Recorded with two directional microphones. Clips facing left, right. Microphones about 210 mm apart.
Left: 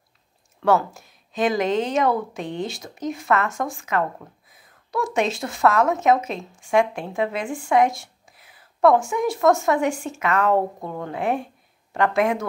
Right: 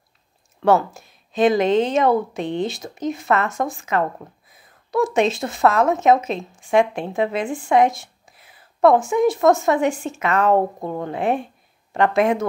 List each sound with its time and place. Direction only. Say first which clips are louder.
0.6 s a woman's voice: right 3 dB; 20° right (ahead or behind)